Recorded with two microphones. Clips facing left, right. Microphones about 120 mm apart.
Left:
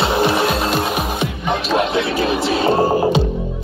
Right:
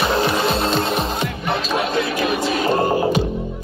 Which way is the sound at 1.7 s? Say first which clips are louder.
Left 4 dB; 65° left (ahead or behind).